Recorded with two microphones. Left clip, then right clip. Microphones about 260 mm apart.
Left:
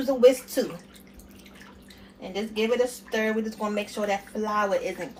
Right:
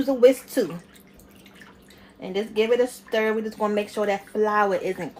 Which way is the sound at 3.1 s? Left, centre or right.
Right.